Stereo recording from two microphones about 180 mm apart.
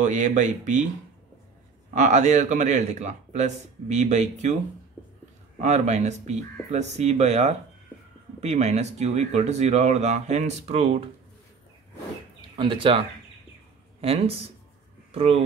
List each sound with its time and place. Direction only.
0.0 s speech: 45° right (ahead or behind)
2.0 s speech: 40° right (ahead or behind)
5.6 s speech: 40° right (ahead or behind)
12.4 s speech: 25° right (ahead or behind)
14.0 s speech: 35° right (ahead or behind)